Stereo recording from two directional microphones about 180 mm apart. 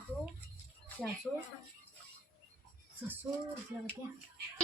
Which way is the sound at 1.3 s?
Centre (ahead or behind).